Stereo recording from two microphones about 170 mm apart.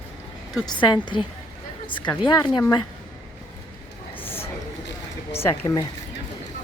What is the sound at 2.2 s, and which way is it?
Speech, 25° left (ahead or behind).